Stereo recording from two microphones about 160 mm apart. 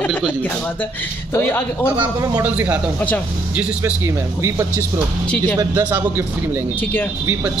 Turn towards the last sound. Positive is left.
turn(degrees=-15)  # may be behind; listen again after turning